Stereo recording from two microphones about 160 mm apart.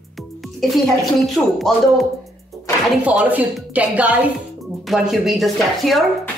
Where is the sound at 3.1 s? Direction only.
10° right (ahead or behind).